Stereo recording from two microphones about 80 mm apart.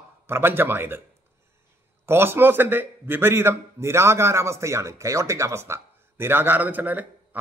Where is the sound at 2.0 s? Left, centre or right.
Right.